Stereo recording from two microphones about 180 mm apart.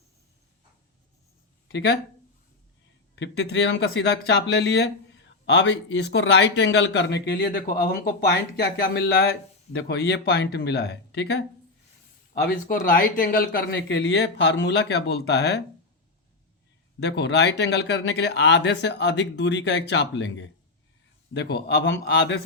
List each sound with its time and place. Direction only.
1.6 s speech: 75° left (ahead or behind)
3.2 s speech: 70° left (ahead or behind)
12.3 s speech: 55° left (ahead or behind)
17.0 s speech: 70° left (ahead or behind); by 20.5 s 90° left
21.3 s speech: 70° left (ahead or behind)